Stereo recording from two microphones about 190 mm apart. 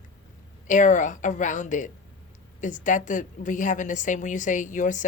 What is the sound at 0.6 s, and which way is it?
A woman's voice, 40° left (ahead or behind).